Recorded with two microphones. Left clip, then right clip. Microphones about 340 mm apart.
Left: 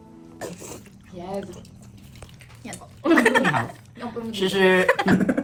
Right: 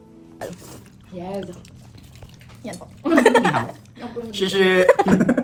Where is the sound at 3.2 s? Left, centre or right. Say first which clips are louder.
Right 5 dB; centre.